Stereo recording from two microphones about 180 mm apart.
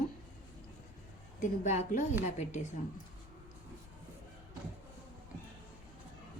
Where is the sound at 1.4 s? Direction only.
45° left (ahead or behind).